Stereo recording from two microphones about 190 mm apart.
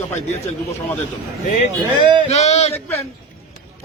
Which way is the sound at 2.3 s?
35° left (ahead or behind).